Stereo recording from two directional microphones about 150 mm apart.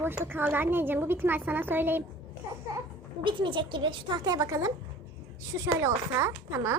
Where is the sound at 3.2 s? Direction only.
35° right (ahead or behind).